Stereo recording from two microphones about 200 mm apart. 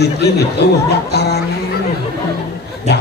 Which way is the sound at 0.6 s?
55° left (ahead or behind).